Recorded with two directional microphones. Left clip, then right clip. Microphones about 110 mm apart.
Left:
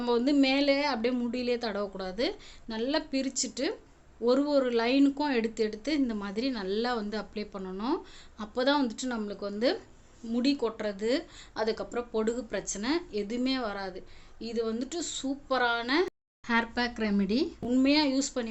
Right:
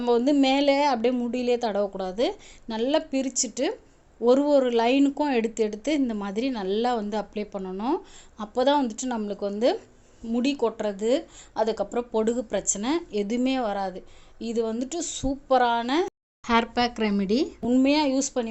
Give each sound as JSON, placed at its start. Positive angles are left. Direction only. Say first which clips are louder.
{"t": 0.0, "sound": "speech", "louder": "right 5 dB", "side_deg": -35}
{"t": 0.4, "sound": "a woman's voice", "louder": "right 5 dB", "side_deg": -50}
{"t": 1.1, "sound": "a woman's voice", "louder": "right 5 dB", "side_deg": -30}
{"t": 3.1, "sound": "a woman's voice", "louder": "right 5 dB", "side_deg": -35}
{"t": 16.5, "sound": "speech", "louder": "right 6 dB", "side_deg": -60}
{"t": 17.1, "sound": "speech", "louder": "right 4 dB", "side_deg": -40}